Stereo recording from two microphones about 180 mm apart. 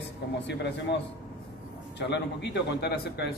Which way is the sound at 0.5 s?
75° left (ahead or behind).